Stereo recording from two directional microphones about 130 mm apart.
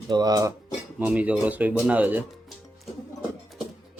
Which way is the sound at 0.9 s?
10° right (ahead or behind).